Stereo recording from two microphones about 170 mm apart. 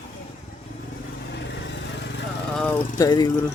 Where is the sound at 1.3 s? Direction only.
85° left.